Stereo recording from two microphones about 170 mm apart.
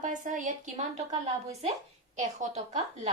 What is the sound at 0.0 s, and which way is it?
A woman's voice, 45° right (ahead or behind).